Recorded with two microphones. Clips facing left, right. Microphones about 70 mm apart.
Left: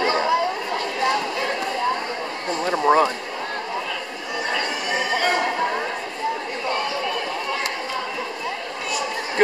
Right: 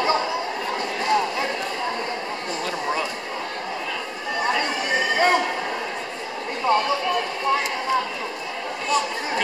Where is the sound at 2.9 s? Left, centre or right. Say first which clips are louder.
Left 11 dB; left.